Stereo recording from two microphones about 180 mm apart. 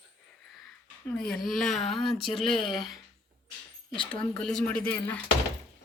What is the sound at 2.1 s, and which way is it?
Speech, 30° left (ahead or behind).